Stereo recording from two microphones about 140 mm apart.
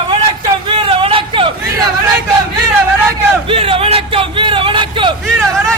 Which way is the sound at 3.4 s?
40° right (ahead or behind).